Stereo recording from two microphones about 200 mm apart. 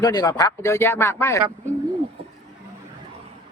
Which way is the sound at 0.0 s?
20° left (ahead or behind).